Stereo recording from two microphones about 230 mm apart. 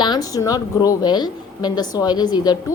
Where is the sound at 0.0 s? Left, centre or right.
Centre.